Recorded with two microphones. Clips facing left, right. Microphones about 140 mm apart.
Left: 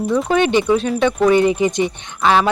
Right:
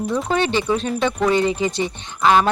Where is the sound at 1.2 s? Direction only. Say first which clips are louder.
Left 5 dB; 15° left (ahead or behind).